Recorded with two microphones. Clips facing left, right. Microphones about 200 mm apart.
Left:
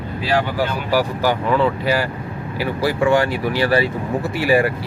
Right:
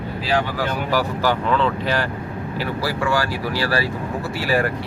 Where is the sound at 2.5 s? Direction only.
20° left (ahead or behind).